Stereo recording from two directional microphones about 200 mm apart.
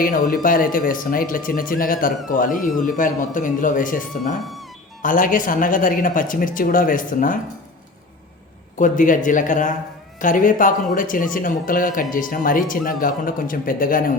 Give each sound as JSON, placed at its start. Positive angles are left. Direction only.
{"t": 0.0, "sound": "speech", "side_deg": 45}
{"t": 8.8, "sound": "speech", "side_deg": 40}